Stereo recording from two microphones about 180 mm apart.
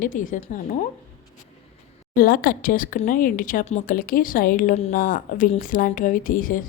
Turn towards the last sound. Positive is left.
turn(degrees=50)  # may be behind; listen again after turning